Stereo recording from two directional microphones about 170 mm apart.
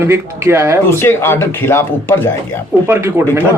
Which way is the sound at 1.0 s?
15° left (ahead or behind).